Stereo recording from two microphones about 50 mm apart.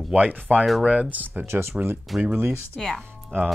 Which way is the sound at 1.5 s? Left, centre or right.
Right.